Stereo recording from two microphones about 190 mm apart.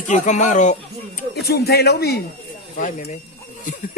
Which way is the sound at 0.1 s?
40° left (ahead or behind).